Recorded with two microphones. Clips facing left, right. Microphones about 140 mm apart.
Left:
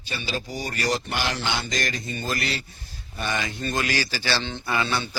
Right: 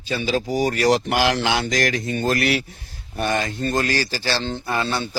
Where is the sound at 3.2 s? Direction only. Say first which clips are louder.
Right 6 dB; 50° right (ahead or behind).